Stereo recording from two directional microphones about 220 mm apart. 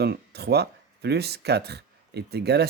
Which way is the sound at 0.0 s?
50° right (ahead or behind).